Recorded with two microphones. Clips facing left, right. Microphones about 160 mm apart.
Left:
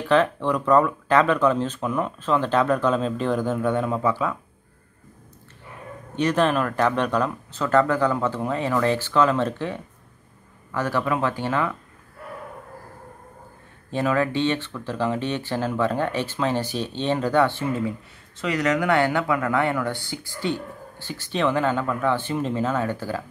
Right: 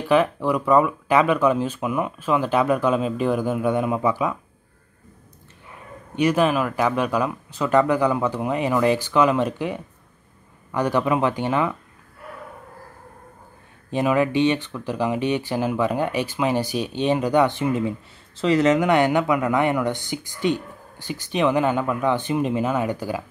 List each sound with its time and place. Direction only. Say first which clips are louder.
0.0 s speech: right 1 dB; 10° right (ahead or behind)
6.1 s speech: right 2 dB; 10° right (ahead or behind)
13.8 s speech: right 2 dB; 15° right (ahead or behind)
18.3 s speech: right 5 dB; 30° right (ahead or behind); by 23.2 s 15° right (ahead or behind)